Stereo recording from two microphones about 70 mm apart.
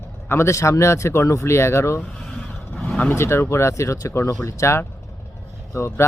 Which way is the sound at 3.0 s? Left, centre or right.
Left.